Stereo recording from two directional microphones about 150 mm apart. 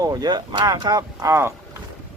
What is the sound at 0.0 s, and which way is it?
Speech, 25° right (ahead or behind).